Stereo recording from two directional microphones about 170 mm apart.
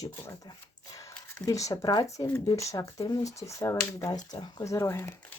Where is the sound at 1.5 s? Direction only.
20° left (ahead or behind).